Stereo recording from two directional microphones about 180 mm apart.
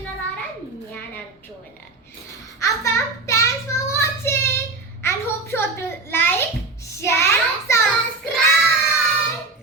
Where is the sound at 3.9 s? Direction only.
15° left (ahead or behind).